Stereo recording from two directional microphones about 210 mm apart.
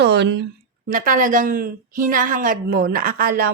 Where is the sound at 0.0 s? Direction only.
55° right (ahead or behind).